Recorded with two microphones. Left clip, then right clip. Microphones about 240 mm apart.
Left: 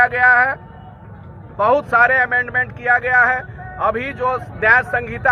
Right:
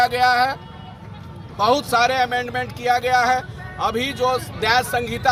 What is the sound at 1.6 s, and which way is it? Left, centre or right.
Speech, centre.